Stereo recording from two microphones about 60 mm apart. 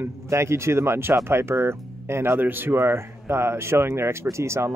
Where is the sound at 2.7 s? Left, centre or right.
Right.